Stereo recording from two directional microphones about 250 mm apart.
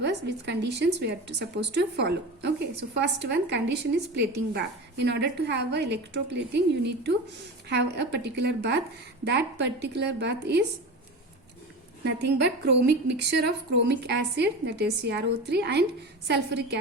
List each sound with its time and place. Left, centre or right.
0.0 s a woman's voice: right
12.0 s a woman's voice: right